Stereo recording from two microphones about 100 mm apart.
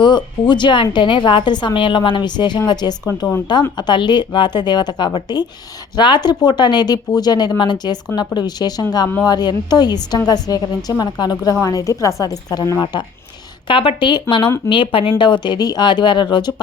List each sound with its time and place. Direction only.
0.0 s a woman's voice: 50° left (ahead or behind)
12.8 s a woman's voice: 50° left (ahead or behind)